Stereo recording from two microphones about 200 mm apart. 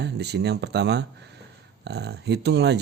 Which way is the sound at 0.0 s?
55° right (ahead or behind).